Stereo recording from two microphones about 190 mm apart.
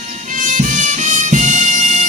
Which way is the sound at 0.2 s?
45° right (ahead or behind).